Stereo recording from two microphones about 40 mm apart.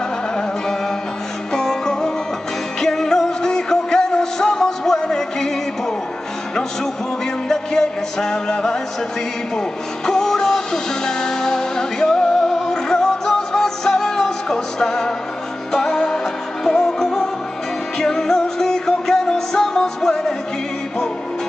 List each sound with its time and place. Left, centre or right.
1.5 s music: centre
7.4 s music: centre
10.0 s music: centre